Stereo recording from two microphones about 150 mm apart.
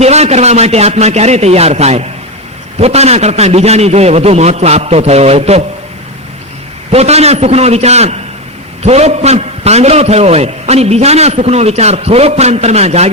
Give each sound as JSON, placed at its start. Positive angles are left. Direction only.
{"t": 0.0, "sound": "a man's voice", "side_deg": -45}
{"t": 6.9, "sound": "a man's voice", "side_deg": -45}